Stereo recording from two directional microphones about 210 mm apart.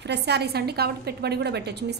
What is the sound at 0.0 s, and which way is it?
A woman's voice, 55° right (ahead or behind).